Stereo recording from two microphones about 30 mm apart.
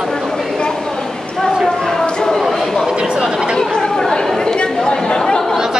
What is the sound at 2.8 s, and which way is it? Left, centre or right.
Speech, right.